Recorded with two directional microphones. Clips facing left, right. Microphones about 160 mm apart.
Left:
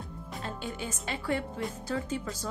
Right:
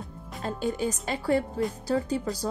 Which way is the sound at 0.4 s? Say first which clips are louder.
Right 9 dB; 40° right (ahead or behind).